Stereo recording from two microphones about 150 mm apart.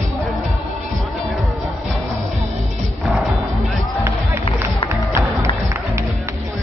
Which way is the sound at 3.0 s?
Centre (ahead or behind).